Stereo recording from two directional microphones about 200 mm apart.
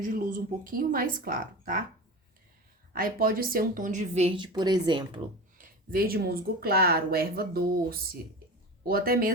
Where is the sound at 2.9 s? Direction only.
45° right (ahead or behind); by 5.1 s 20° right (ahead or behind).